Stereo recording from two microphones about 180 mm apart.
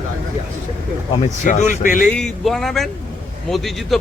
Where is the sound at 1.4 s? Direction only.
45° left (ahead or behind).